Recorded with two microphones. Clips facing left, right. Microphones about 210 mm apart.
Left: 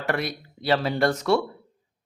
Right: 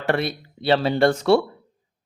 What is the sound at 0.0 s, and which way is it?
Speech, 30° right (ahead or behind).